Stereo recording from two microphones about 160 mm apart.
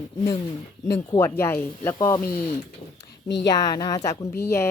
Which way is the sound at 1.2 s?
15° left (ahead or behind).